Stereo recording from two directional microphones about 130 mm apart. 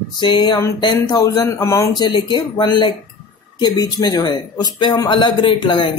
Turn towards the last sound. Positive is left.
turn(degrees=40)  # may be behind; listen again after turning